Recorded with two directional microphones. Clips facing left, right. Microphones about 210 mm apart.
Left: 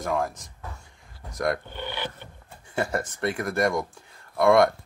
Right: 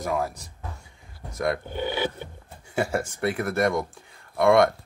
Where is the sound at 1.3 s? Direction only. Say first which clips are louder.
Even; centre (ahead or behind).